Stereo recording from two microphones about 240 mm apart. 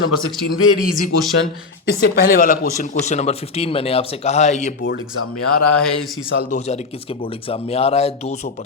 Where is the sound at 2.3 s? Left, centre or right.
Left.